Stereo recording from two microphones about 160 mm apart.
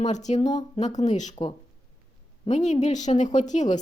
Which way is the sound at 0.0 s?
45° left (ahead or behind).